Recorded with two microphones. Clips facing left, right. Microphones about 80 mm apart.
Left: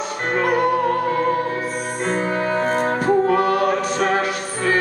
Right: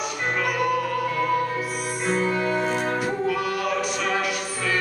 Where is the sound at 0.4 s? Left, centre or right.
Left.